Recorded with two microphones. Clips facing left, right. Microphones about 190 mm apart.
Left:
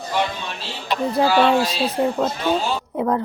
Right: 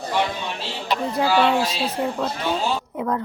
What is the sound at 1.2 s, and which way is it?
Speech, 35° left (ahead or behind).